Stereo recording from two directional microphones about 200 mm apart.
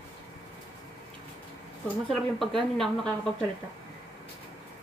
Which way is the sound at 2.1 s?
Centre (ahead or behind).